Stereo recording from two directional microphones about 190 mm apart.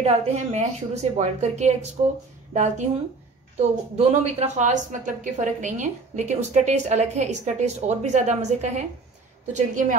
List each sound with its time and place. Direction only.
0.0 s a woman's voice: 35° right (ahead or behind)